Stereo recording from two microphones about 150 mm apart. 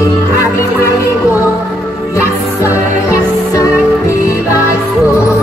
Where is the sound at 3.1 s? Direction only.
20° left (ahead or behind).